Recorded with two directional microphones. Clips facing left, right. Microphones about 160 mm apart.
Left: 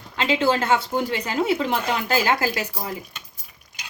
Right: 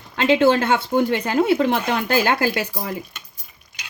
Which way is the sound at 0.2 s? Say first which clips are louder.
Right 5 dB; 55° right (ahead or behind).